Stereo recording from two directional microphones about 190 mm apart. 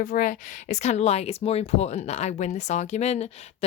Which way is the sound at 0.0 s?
45° left (ahead or behind).